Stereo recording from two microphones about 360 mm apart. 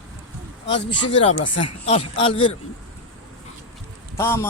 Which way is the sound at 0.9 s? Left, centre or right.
Centre.